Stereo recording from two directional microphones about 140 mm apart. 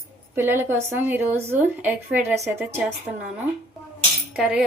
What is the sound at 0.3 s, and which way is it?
A woman's voice, 15° right (ahead or behind).